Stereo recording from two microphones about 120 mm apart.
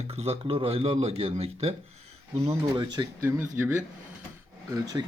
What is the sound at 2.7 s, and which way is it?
Speech, 40° right (ahead or behind).